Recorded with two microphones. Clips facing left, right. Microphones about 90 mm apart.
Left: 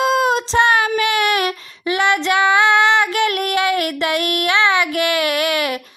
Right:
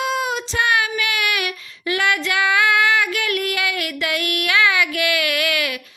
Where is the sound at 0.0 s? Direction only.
35° left (ahead or behind).